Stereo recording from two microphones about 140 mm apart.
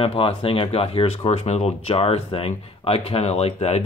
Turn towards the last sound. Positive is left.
turn(degrees=50)  # may be behind; listen again after turning